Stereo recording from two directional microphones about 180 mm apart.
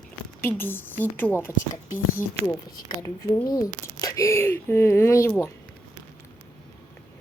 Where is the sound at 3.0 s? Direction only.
20° left (ahead or behind).